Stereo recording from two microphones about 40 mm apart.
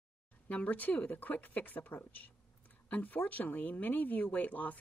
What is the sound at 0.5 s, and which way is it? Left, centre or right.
A woman's voice, left.